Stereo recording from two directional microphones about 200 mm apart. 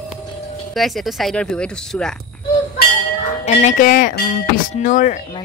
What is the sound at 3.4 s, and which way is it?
Speech, 35° left (ahead or behind).